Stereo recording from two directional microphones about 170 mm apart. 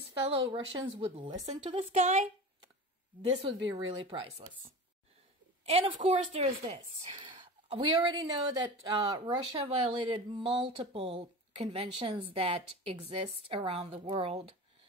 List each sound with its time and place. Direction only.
0.3 s a woman's voice: 35° right (ahead or behind)
3.4 s speech: 30° right (ahead or behind)
5.7 s speech: 35° right (ahead or behind)
7.2 s a woman's voice: 30° right (ahead or behind)